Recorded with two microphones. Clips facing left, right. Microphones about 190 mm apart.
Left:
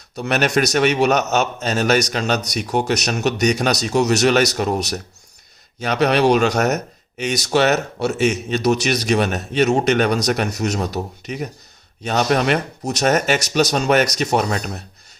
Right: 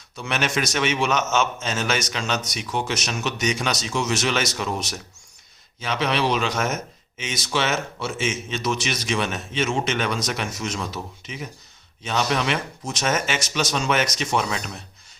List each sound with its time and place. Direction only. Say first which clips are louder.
0.2 s speech: left 7 dB; 40° left (ahead or behind)
2.3 s speech: left 4 dB; 70° left (ahead or behind)
2.6 s a man's voice: left 7 dB; 45° left (ahead or behind)